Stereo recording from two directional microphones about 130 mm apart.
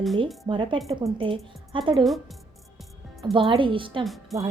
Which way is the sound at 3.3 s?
40° right (ahead or behind).